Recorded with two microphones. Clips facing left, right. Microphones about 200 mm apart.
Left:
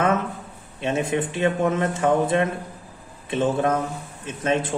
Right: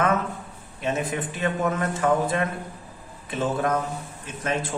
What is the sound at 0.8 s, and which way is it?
Speech, 25° left (ahead or behind).